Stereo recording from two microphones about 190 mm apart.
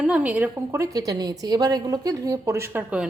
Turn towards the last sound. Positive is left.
turn(degrees=-10)  # may be behind; listen again after turning